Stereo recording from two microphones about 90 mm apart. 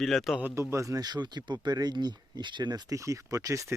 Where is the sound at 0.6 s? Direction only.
35° right (ahead or behind).